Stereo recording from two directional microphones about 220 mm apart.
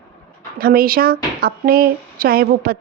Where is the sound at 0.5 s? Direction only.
45° right (ahead or behind).